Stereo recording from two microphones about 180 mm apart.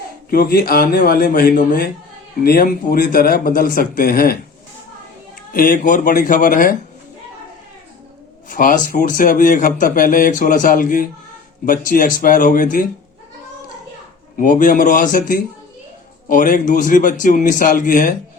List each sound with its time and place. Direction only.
0.3 s a man's voice: 55° left (ahead or behind)
5.5 s a man's voice: 50° left (ahead or behind)
8.4 s a man's voice: 50° left (ahead or behind)
14.3 s a man's voice: 50° left (ahead or behind)